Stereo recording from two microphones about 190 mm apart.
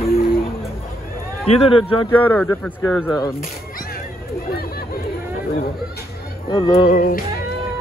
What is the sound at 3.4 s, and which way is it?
Music, 50° left (ahead or behind).